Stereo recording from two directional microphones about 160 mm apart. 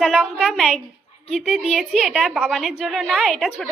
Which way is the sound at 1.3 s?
40° left (ahead or behind).